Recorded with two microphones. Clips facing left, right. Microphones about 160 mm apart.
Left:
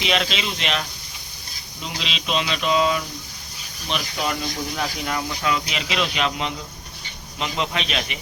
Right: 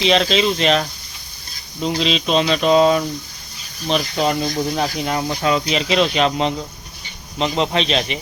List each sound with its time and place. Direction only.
0.0 s speech: 35° right (ahead or behind)